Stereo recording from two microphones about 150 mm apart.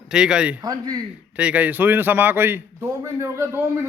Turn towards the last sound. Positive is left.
turn(degrees=-15)  # may be behind; listen again after turning